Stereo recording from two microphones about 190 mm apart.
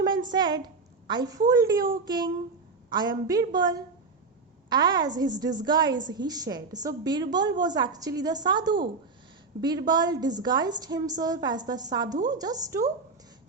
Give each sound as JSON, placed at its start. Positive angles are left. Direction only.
{"t": 0.3, "sound": "a woman's voice", "side_deg": -20}